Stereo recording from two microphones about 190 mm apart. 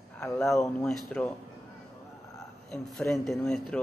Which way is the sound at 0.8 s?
5° left (ahead or behind).